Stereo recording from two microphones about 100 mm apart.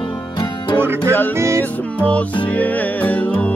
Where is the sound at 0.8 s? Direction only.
20° right (ahead or behind).